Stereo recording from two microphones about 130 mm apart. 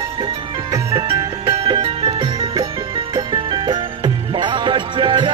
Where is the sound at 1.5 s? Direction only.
45° right (ahead or behind).